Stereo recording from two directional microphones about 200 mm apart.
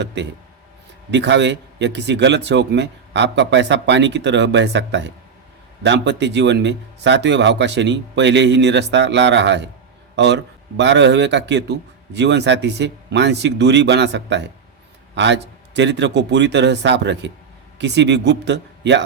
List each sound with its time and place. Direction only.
0.0 s a man's voice: 60° right (ahead or behind)